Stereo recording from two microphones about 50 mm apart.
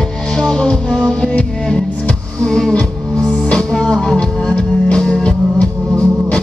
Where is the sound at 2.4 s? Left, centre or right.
Centre.